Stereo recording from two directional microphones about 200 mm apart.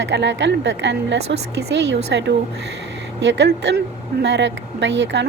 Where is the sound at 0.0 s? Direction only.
60° right (ahead or behind).